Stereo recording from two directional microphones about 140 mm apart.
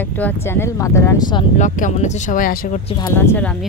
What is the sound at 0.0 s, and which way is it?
Speech, 15° left (ahead or behind).